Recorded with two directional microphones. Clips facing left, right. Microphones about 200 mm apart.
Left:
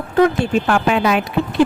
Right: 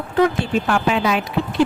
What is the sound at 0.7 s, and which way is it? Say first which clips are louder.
Speech: left 1 dB; 55° left (ahead or behind).